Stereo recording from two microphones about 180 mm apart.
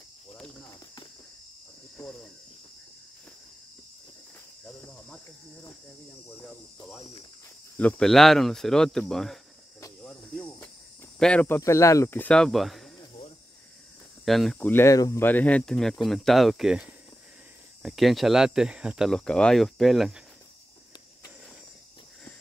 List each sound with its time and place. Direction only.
2.0 s speech: 15° left (ahead or behind)
4.6 s cricket: 5° left (ahead or behind)
7.7 s speech: 5° left (ahead or behind)
9.8 s cricket: 15° left (ahead or behind)
11.1 s speech: 5° left (ahead or behind)
14.2 s speech: centre (ahead or behind)